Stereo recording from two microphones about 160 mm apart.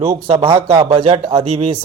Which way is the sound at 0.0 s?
40° right (ahead or behind).